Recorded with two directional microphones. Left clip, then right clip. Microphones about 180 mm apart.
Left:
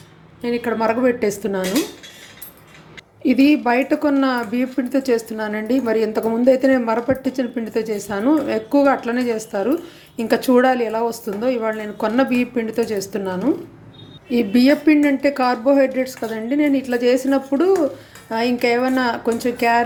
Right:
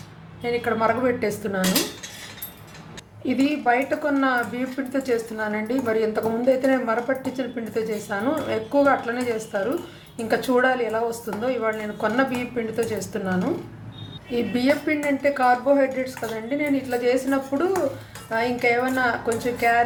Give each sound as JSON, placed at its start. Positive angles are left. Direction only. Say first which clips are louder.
{"t": 0.4, "sound": "speech", "louder": "left 2 dB", "side_deg": 45}
{"t": 3.2, "sound": "speech", "louder": "left 6 dB", "side_deg": 45}